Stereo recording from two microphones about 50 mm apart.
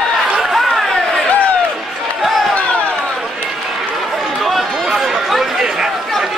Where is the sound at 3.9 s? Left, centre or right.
Centre.